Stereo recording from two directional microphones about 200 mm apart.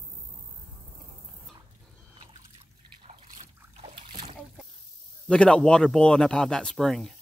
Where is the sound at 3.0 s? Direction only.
30° right (ahead or behind).